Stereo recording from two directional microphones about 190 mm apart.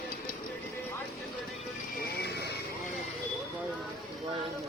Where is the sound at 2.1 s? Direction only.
60° left (ahead or behind).